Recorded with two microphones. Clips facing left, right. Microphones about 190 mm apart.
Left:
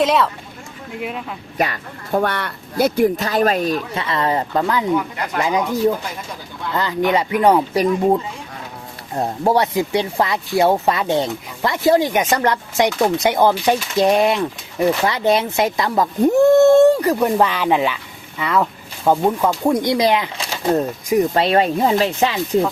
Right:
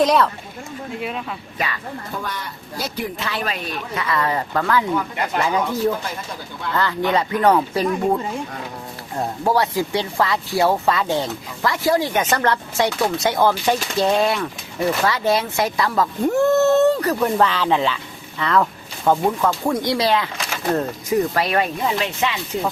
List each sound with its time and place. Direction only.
0.0 s speech: centre (ahead or behind)
1.5 s a woman's voice: 50° left (ahead or behind)
3.9 s speech: 25° left (ahead or behind)
9.1 s speech: 25° left (ahead or behind)
21.3 s speech: 30° left (ahead or behind)